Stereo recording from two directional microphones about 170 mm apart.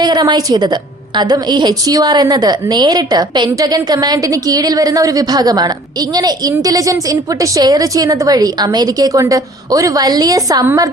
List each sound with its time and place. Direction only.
0.0 s a woman's voice: 25° right (ahead or behind)